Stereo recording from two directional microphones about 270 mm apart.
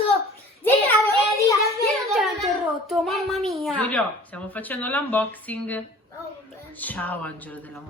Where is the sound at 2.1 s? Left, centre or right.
Centre.